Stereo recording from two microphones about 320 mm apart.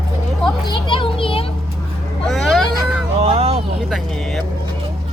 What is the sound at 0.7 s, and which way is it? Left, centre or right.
Children playing, centre.